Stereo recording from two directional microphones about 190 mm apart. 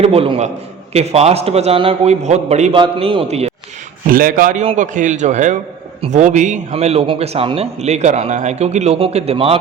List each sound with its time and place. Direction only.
0.0 s a man's voice: 30° right (ahead or behind)
4.1 s a man's voice: 50° right (ahead or behind); by 9.6 s 30° right (ahead or behind)